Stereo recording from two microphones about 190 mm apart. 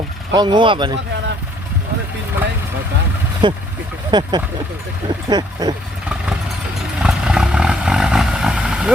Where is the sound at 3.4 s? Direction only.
25° right (ahead or behind).